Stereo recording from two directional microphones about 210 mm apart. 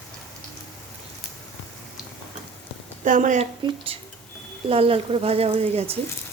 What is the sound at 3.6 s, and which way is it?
Speech, 25° right (ahead or behind).